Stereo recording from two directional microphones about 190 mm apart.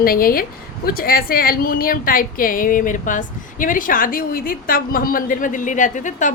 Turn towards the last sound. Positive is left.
turn(degrees=40)  # may be behind; listen again after turning